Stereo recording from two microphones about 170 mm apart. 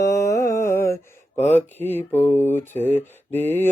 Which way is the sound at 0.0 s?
20° left (ahead or behind).